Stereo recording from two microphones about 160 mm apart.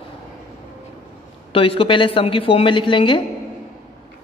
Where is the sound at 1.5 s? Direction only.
35° left (ahead or behind).